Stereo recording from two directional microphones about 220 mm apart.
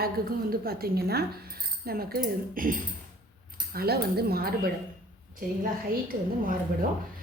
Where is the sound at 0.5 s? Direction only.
45° right (ahead or behind).